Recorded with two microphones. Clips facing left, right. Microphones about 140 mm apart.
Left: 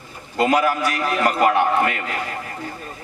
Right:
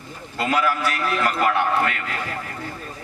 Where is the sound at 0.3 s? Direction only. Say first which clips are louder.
Left 4 dB; 20° left (ahead or behind).